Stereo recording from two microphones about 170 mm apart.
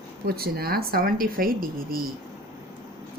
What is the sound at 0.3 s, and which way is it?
A woman's voice, 65° right (ahead or behind).